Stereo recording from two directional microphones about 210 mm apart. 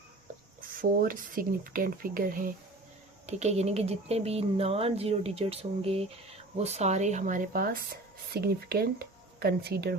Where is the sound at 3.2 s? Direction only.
30° right (ahead or behind); by 10.0 s 50° right (ahead or behind).